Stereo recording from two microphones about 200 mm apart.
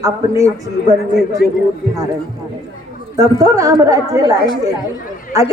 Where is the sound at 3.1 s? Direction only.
15° right (ahead or behind).